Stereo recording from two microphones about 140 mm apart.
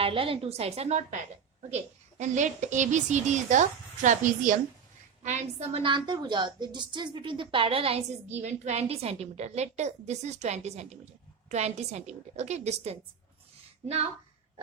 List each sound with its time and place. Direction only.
0.0 s a woman's voice: 40° right (ahead or behind); by 4.6 s 65° right (ahead or behind)
5.2 s a woman's voice: 55° right (ahead or behind)
8.4 s a woman's voice: 55° right (ahead or behind)